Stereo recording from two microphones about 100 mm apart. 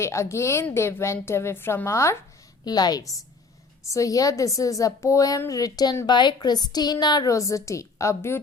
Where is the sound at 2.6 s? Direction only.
40° left (ahead or behind).